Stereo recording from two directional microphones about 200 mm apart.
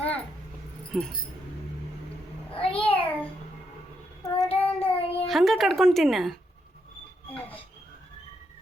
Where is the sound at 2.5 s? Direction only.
25° left (ahead or behind).